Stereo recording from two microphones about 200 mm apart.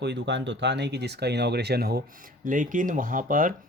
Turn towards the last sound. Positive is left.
turn(degrees=-45)  # may be behind; listen again after turning